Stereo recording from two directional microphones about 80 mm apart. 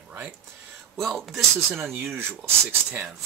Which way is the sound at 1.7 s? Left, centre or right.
Right.